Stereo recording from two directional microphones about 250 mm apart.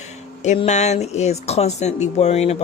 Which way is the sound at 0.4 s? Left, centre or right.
Left.